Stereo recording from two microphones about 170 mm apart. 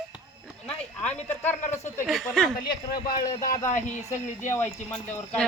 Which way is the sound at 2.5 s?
65° left (ahead or behind).